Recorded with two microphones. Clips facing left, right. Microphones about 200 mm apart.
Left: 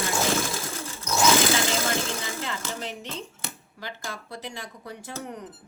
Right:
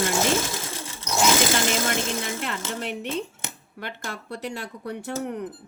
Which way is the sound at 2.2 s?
65° right (ahead or behind).